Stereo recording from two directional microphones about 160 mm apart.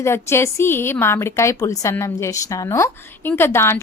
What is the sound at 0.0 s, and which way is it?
A woman's voice, 15° left (ahead or behind).